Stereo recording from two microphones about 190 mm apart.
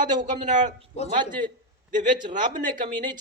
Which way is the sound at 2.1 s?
25° right (ahead or behind).